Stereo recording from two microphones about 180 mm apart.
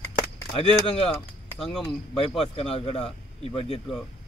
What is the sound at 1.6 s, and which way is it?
Speech, centre (ahead or behind).